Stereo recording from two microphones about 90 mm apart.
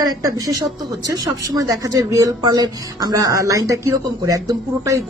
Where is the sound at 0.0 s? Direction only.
45° right (ahead or behind).